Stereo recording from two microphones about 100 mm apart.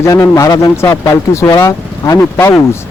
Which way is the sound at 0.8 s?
30° left (ahead or behind).